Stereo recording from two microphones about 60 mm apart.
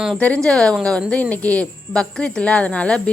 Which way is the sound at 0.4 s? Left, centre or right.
Centre.